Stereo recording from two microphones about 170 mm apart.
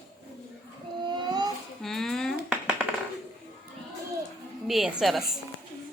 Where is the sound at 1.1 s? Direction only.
25° right (ahead or behind).